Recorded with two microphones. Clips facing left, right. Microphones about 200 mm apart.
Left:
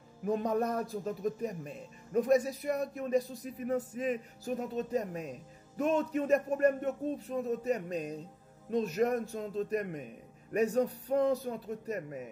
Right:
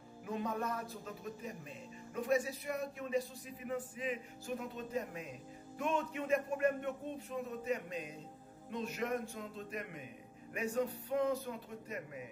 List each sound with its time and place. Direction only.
0.2 s a man's voice: 40° left (ahead or behind)